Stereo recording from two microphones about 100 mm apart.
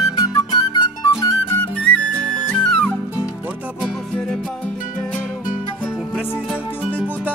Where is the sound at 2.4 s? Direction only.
10° left (ahead or behind).